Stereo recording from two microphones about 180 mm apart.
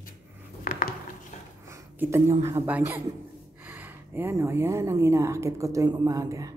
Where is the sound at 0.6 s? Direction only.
50° left (ahead or behind).